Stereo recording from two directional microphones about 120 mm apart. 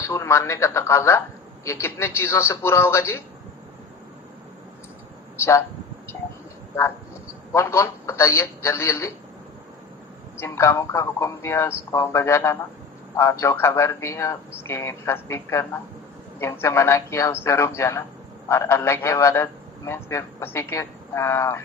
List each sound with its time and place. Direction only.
0.0 s a man's voice: 25° left (ahead or behind)
7.5 s a man's voice: 20° left (ahead or behind)
10.4 s a man's voice: 20° left (ahead or behind)